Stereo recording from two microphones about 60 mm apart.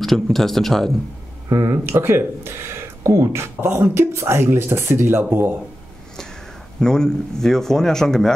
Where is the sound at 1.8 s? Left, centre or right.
Right.